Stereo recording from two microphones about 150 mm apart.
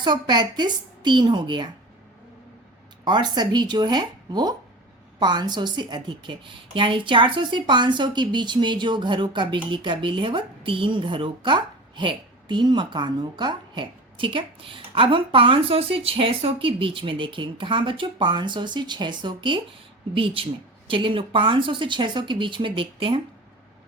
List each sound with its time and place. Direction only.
0.0 s speech: 30° right (ahead or behind)
3.0 s speech: 30° right (ahead or behind)